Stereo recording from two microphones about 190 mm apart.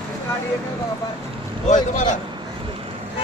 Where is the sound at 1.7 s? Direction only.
40° left (ahead or behind).